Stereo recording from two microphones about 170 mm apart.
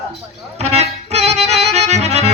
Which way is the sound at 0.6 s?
40° right (ahead or behind).